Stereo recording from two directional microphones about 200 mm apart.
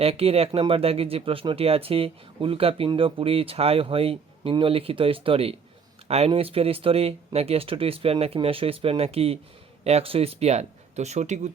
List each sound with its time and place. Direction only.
0.0 s speech: 30° right (ahead or behind)